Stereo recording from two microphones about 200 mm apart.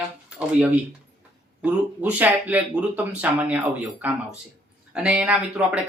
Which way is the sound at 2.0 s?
10° right (ahead or behind).